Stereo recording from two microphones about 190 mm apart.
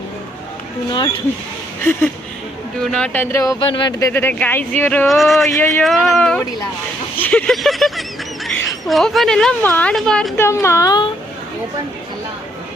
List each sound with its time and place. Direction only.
0.9 s speech: 25° left (ahead or behind)
1.8 s speech: 10° left (ahead or behind)
4.1 s speech: 10° left (ahead or behind)
5.5 s speech: 10° left (ahead or behind)
5.8 s a woman's voice: centre (ahead or behind); by 11.1 s 20° left (ahead or behind)